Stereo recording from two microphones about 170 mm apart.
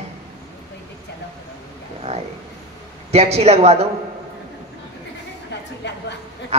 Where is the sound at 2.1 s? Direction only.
40° right (ahead or behind).